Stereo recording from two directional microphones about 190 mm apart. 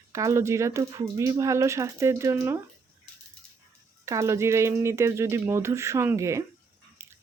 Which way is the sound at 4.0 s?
15° right (ahead or behind).